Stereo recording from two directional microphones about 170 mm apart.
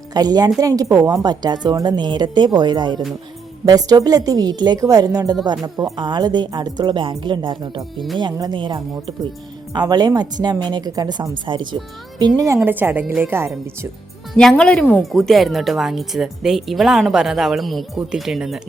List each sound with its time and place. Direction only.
0.1 s a woman's voice: 20° right (ahead or behind)
7.9 s speech: centre (ahead or behind)
8.2 s a woman's voice: 25° right (ahead or behind)
12.5 s speech: 10° right (ahead or behind)
14.3 s speech: 5° left (ahead or behind)